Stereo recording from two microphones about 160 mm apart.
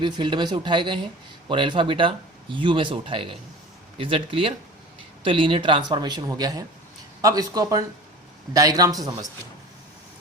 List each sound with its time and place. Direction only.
0.0 s speech: 30° right (ahead or behind)